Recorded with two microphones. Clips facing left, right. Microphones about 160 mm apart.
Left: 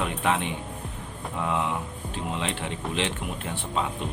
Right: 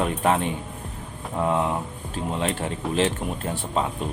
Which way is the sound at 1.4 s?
40° right (ahead or behind).